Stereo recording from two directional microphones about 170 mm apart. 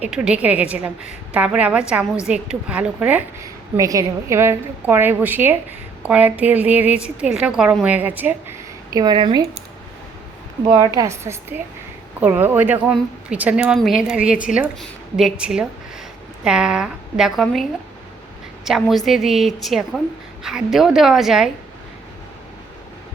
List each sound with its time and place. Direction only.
0.0 s speech: 5° right (ahead or behind)
3.4 s a woman's voice: 20° right (ahead or behind)
10.8 s a woman's voice: 20° right (ahead or behind); by 21.5 s centre (ahead or behind)